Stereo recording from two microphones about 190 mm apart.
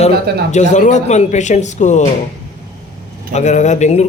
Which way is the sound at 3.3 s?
40° left (ahead or behind).